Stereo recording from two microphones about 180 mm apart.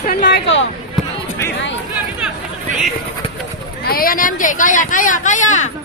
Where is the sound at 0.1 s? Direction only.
65° left (ahead or behind); by 0.7 s 80° left.